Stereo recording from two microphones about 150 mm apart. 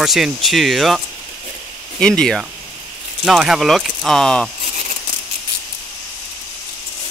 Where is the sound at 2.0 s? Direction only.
5° left (ahead or behind).